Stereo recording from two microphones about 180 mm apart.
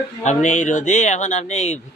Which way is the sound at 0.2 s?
40° left (ahead or behind).